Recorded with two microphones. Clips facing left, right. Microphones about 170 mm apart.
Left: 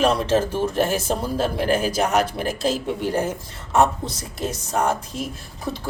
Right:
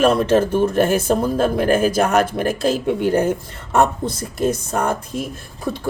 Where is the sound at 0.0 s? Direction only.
50° right (ahead or behind).